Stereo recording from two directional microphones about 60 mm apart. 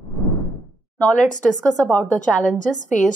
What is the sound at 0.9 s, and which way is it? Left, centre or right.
A woman's voice, centre.